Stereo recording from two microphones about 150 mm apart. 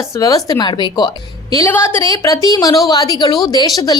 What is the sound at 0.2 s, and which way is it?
A woman's voice, 25° left (ahead or behind).